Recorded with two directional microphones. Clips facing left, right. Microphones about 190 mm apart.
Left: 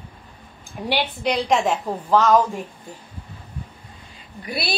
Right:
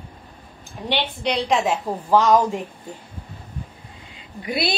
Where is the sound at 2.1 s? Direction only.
10° right (ahead or behind).